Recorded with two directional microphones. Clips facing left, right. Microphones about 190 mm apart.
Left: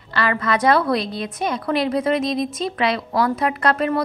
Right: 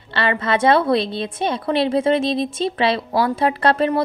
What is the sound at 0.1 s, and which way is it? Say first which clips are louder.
A woman's voice: right 1 dB; 25° right (ahead or behind).